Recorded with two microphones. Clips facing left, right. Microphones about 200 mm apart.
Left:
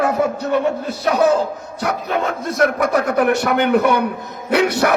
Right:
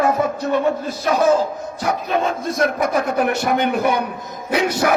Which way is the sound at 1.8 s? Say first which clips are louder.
Even; 65° left (ahead or behind).